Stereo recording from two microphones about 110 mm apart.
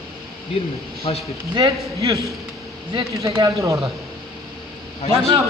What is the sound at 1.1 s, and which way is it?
Speech, 55° left (ahead or behind).